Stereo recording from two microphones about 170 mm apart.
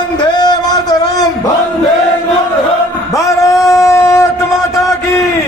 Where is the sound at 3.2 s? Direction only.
20° left (ahead or behind).